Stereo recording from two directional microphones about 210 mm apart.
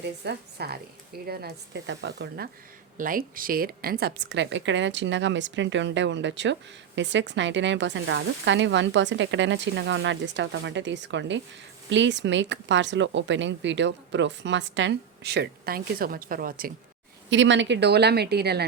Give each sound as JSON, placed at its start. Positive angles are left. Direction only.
{"t": 0.3, "sound": "a woman's voice", "side_deg": -50}
{"t": 3.0, "sound": "a woman's voice", "side_deg": -40}
{"t": 17.2, "sound": "a woman's voice", "side_deg": -60}